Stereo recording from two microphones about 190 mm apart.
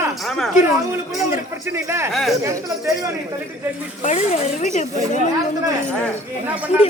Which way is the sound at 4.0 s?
40° left (ahead or behind).